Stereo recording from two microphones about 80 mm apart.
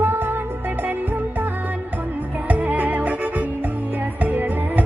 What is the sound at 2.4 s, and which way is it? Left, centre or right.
Music, centre.